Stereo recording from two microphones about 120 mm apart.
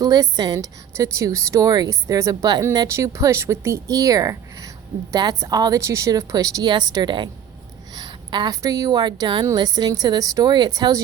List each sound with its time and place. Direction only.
0.0 s a woman's voice: 35° right (ahead or behind)
7.9 s a sound: 40° right (ahead or behind)
8.6 s a woman's voice: 25° right (ahead or behind)